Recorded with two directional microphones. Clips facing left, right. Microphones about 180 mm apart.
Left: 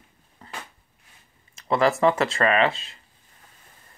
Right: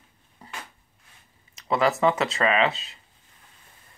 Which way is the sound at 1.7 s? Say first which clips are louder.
Left 2 dB; centre (ahead or behind).